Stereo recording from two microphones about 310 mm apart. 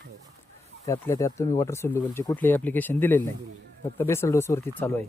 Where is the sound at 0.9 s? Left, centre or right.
Centre.